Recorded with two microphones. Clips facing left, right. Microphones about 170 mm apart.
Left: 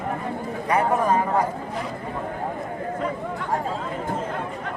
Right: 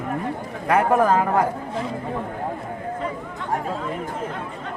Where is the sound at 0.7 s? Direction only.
70° right (ahead or behind).